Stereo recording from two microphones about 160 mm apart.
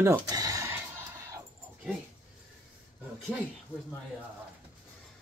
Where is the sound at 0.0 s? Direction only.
20° right (ahead or behind).